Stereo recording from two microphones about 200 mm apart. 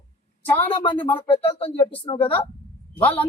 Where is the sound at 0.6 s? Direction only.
25° left (ahead or behind).